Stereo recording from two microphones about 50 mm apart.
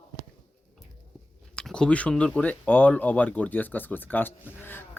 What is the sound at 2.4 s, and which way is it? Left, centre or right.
Speech, left.